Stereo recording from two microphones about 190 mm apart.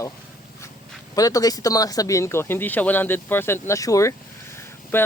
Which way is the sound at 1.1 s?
20° left (ahead or behind).